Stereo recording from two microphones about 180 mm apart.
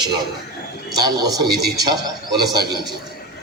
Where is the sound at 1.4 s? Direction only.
60° right (ahead or behind).